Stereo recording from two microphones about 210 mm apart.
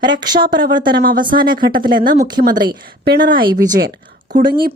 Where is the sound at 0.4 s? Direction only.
45° right (ahead or behind).